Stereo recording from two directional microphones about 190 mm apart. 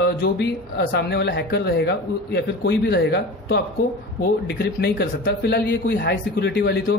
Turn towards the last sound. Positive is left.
turn(degrees=65)  # may be behind; listen again after turning